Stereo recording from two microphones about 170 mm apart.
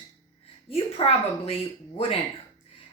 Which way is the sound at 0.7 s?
35° left (ahead or behind).